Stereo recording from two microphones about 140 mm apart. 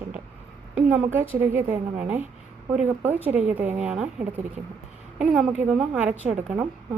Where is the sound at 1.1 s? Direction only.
15° right (ahead or behind).